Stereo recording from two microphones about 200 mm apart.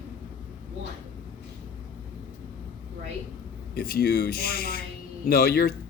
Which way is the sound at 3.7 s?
50° left (ahead or behind).